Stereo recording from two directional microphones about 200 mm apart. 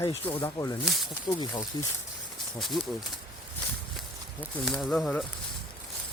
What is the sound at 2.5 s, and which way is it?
Speech, centre (ahead or behind).